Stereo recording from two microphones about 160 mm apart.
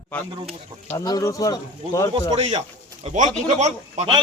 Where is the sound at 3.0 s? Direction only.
50° right (ahead or behind).